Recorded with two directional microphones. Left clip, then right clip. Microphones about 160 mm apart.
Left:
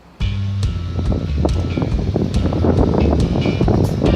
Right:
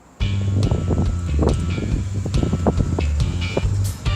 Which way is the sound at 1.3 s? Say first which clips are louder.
Right 3 dB; centre (ahead or behind).